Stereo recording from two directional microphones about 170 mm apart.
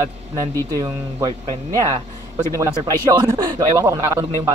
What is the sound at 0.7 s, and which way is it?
Speech, 25° right (ahead or behind).